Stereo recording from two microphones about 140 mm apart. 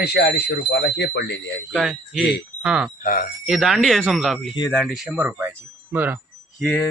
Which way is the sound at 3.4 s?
Centre (ahead or behind).